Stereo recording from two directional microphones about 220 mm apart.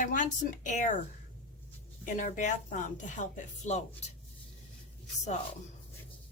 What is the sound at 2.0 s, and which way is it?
Speech, 35° left (ahead or behind).